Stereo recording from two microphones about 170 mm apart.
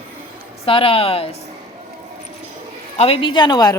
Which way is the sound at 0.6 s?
35° left (ahead or behind).